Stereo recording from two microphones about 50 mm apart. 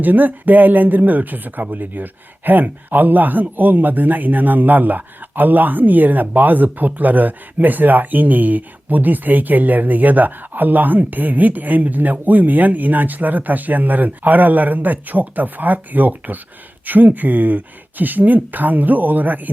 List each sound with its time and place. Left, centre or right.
0.0 s a man's voice: right